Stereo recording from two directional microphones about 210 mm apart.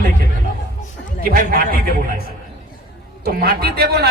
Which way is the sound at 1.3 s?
40° right (ahead or behind).